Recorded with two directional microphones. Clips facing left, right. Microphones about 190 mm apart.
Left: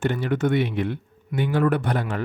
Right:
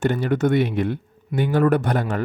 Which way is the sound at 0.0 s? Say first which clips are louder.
Right 3 dB; 40° right (ahead or behind).